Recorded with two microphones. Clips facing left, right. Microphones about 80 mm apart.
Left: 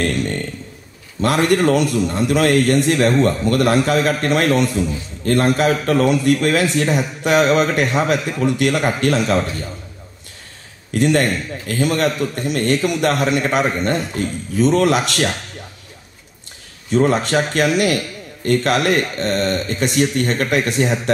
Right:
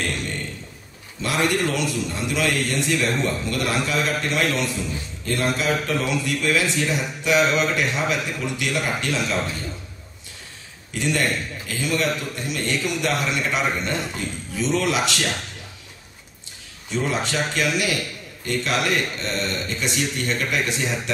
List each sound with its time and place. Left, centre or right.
1.2 s a man's voice: left
10.9 s a man's voice: left
16.9 s a man's voice: left